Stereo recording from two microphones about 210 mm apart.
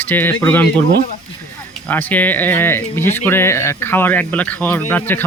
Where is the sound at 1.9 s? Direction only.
10° left (ahead or behind).